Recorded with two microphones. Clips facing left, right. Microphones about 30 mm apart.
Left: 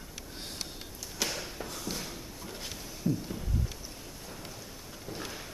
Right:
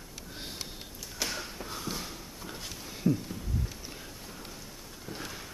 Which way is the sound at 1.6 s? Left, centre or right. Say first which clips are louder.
Right 1 dB; centre.